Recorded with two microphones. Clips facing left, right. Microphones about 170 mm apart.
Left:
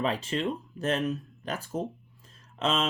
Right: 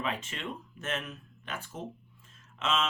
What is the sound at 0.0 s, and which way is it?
Speech, 35° left (ahead or behind).